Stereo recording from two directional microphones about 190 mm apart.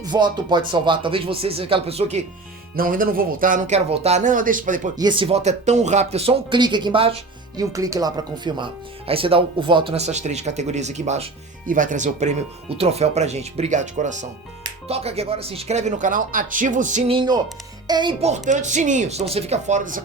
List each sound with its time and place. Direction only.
0.0 s speech: 25° right (ahead or behind)
2.7 s speech: 50° right (ahead or behind)
3.8 s speech: 30° right (ahead or behind)
4.9 s speech: 25° right (ahead or behind); by 20.0 s 40° right (ahead or behind)